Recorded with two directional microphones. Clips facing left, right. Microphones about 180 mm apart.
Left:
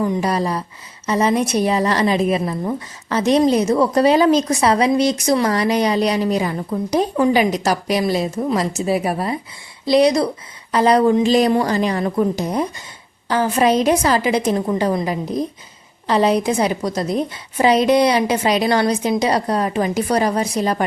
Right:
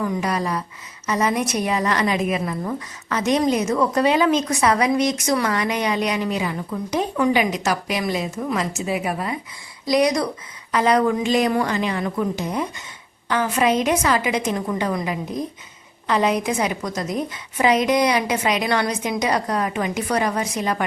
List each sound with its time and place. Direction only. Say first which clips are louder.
0.0 s a woman's voice: left 4 dB; 30° left (ahead or behind)